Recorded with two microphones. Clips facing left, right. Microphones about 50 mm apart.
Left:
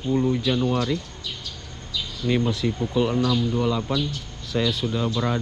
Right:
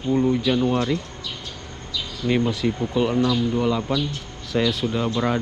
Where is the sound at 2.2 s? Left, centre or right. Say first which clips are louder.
Right 2 dB; centre.